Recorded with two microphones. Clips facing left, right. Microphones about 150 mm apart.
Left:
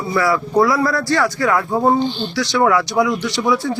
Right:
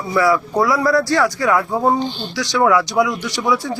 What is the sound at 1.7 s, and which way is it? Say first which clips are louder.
Speech: left 1 dB; 10° left (ahead or behind).